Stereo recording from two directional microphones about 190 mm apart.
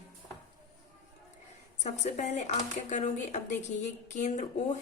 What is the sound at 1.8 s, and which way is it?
Speech, 35° left (ahead or behind).